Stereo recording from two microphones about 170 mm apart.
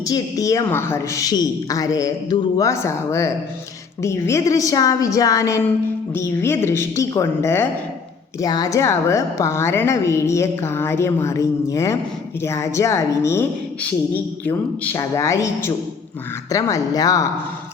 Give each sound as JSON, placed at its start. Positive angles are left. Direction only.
{"t": 0.0, "sound": "a woman's voice", "side_deg": 20}
{"t": 14.4, "sound": "a woman's voice", "side_deg": 15}